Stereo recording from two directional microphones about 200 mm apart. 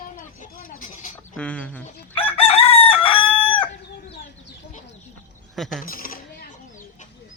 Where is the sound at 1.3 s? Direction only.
5° left (ahead or behind).